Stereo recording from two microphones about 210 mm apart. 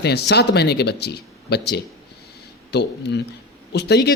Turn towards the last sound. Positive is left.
turn(degrees=50)  # may be behind; listen again after turning